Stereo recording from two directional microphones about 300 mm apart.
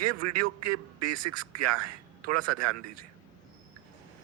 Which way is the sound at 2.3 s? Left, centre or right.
Right.